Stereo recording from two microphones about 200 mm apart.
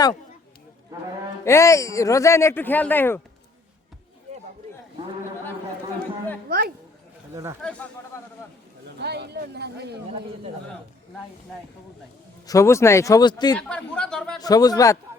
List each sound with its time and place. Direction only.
1.5 s speech: 15° left (ahead or behind)
7.6 s a man's voice: 5° left (ahead or behind)
9.0 s speech: 55° right (ahead or behind)
12.5 s speech: 15° left (ahead or behind)
13.6 s a man's voice: 5° left (ahead or behind)
14.4 s a man's voice: 20° left (ahead or behind)